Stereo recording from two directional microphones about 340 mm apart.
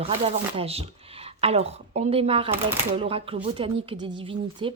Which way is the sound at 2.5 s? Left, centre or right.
Centre.